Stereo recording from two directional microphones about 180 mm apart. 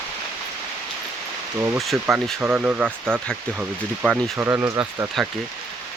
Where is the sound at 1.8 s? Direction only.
Centre (ahead or behind).